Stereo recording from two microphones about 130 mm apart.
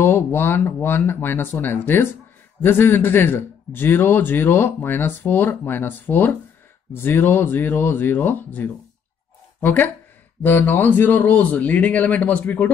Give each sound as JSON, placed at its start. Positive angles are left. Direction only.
{"t": 0.0, "sound": "a man's voice", "side_deg": 15}